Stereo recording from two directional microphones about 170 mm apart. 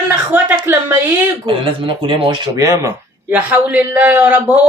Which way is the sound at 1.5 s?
30° right (ahead or behind).